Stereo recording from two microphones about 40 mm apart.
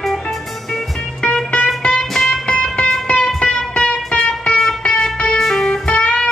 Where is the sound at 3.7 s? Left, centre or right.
Left.